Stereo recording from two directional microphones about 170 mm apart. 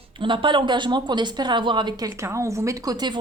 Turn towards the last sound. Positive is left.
turn(degrees=-25)  # may be behind; listen again after turning